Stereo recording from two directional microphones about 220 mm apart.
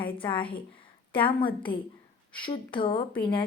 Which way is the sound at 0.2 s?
25° left (ahead or behind).